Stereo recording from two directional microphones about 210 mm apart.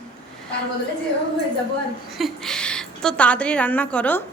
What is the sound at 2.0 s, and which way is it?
A woman's voice, centre (ahead or behind).